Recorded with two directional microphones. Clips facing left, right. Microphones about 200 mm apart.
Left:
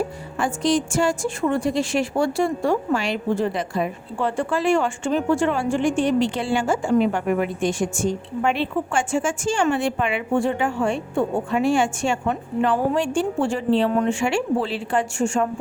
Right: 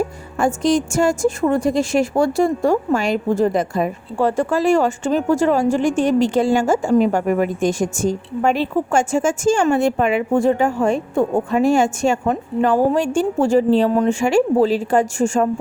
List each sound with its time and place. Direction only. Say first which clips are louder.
0.3 s a woman's voice: right 4 dB; 45° right (ahead or behind)